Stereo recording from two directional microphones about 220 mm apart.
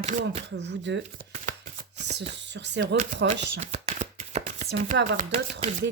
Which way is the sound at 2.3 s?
55° right (ahead or behind).